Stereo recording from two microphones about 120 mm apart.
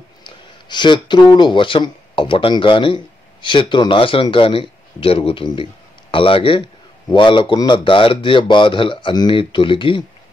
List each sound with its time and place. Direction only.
0.2 s a man's voice: 40° left (ahead or behind)